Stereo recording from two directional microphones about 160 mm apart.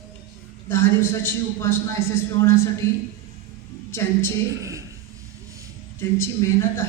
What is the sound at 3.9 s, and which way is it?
Speech, 15° left (ahead or behind).